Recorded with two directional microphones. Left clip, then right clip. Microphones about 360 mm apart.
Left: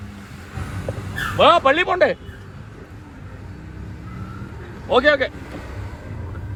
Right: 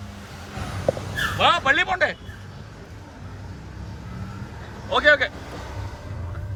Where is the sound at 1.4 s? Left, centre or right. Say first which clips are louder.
Left 5 dB; centre.